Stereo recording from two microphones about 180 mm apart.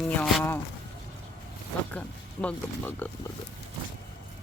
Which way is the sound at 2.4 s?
10° left (ahead or behind).